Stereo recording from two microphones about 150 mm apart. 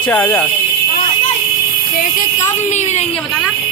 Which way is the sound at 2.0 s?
60° left (ahead or behind).